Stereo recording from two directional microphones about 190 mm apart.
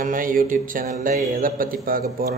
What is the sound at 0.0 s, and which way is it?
Speech, 45° right (ahead or behind).